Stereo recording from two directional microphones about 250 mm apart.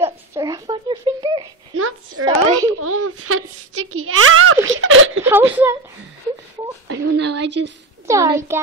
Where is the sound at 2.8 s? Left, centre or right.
Right.